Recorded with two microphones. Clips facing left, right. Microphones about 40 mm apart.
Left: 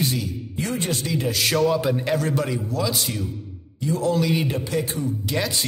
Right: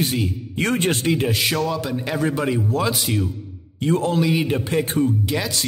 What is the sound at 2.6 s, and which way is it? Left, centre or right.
A man's voice, right.